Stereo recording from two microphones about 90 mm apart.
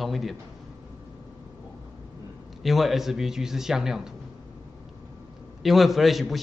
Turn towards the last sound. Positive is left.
turn(degrees=0)  # may be behind; listen again after turning